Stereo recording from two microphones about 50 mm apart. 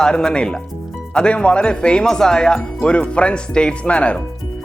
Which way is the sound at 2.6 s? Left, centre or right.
Left.